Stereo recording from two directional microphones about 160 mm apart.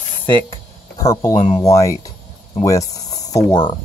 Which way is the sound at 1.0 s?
20° left (ahead or behind).